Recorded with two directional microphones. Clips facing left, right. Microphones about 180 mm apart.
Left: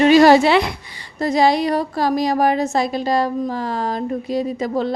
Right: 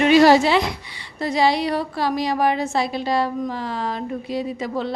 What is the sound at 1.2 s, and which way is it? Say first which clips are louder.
A woman's voice: left 3 dB; 45° left (ahead or behind).